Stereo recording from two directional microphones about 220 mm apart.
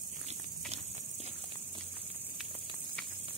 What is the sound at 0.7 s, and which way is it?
Walk, 30° right (ahead or behind).